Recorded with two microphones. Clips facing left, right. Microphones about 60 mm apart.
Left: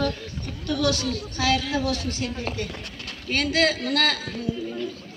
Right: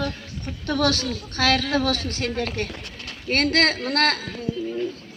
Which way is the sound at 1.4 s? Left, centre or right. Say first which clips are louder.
Right 3 dB; right.